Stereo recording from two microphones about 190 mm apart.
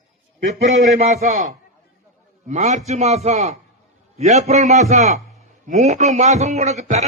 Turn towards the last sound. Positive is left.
turn(degrees=-40)  # may be behind; listen again after turning